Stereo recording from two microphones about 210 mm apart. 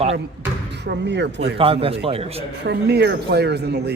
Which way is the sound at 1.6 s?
25° right (ahead or behind).